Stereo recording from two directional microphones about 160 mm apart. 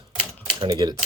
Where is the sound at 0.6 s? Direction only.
25° right (ahead or behind).